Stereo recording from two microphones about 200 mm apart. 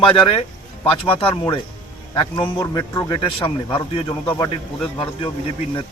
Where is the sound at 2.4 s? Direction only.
15° left (ahead or behind).